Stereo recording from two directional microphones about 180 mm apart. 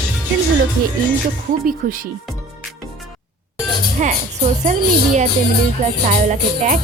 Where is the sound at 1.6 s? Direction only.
50° right (ahead or behind).